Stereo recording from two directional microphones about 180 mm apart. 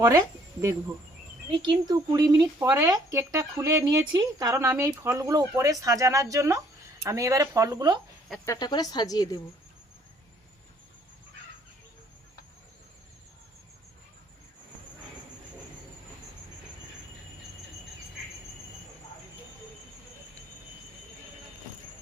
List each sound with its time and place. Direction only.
1.5 s speech: 25° right (ahead or behind)
8.4 s a woman's voice: 20° left (ahead or behind)